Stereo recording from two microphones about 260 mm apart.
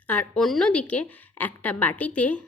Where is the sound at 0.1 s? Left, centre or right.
Centre.